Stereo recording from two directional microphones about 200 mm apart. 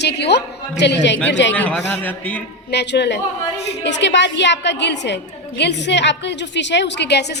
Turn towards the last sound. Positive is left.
turn(degrees=60)  # may be behind; listen again after turning